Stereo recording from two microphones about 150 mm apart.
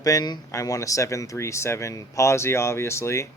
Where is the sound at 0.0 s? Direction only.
25° left (ahead or behind).